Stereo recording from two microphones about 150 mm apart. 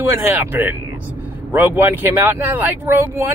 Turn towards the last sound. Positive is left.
turn(degrees=-15)  # may be behind; listen again after turning